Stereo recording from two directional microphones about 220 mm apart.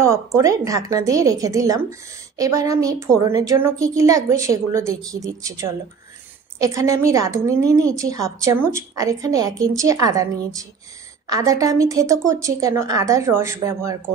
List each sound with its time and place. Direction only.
0.0 s a woman's voice: 15° right (ahead or behind)